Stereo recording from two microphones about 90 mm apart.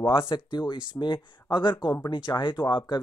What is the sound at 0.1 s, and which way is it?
Speech, 70° left (ahead or behind).